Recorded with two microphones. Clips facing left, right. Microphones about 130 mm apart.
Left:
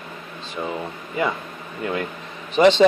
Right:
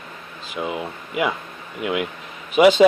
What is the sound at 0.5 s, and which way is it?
Speech, 10° right (ahead or behind).